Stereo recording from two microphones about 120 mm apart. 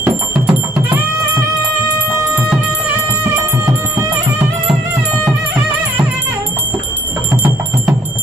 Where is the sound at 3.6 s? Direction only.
25° right (ahead or behind).